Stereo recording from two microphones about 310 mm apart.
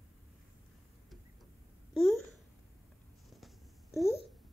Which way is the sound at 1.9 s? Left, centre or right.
Centre.